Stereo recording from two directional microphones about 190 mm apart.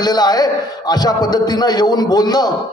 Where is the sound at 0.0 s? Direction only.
20° left (ahead or behind).